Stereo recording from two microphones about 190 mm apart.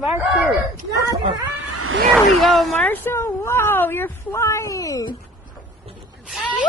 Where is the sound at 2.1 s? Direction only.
Centre (ahead or behind); by 5.2 s 20° left (ahead or behind).